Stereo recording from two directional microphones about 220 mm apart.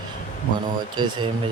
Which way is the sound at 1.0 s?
20° right (ahead or behind).